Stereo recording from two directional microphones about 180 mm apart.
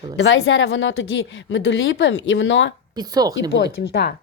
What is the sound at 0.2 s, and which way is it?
A woman's voice, 90° left.